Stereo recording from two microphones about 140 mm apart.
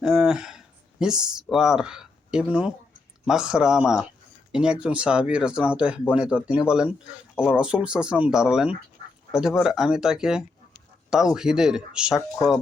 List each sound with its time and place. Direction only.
0.0 s speech: 5° right (ahead or behind)